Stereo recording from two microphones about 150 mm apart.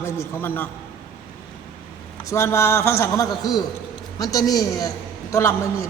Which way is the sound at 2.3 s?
20° left (ahead or behind).